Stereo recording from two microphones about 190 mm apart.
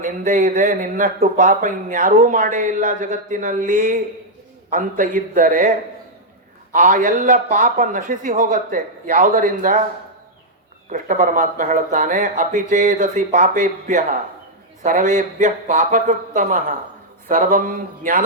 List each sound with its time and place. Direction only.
0.0 s speech: 45° right (ahead or behind)
6.7 s speech: 45° right (ahead or behind)
10.9 s speech: 45° right (ahead or behind)